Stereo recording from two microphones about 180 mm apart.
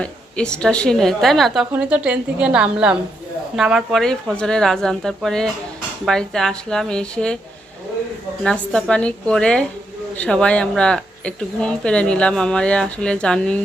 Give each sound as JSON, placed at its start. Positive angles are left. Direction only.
{"t": 0.0, "sound": "speech", "side_deg": 5}
{"t": 8.4, "sound": "speech", "side_deg": 5}